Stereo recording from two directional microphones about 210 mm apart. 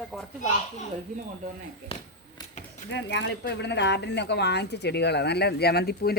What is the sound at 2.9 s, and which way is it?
Speech, 60° left (ahead or behind).